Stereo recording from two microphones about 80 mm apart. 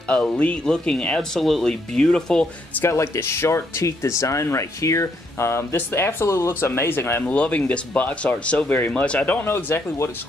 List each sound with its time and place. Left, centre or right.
0.1 s speech: centre
2.8 s speech: left
7.2 s speech: centre; by 10.1 s left